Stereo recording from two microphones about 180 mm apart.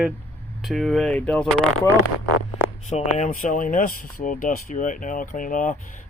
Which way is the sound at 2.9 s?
40° left (ahead or behind).